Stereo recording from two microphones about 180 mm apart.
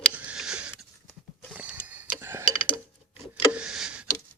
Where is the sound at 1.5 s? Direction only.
10° right (ahead or behind).